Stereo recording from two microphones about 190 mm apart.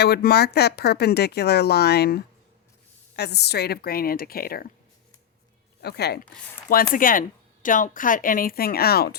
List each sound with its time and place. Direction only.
0.0 s speech: 55° left (ahead or behind)
5.8 s speech: 60° left (ahead or behind)
6.9 s speech: 45° left (ahead or behind)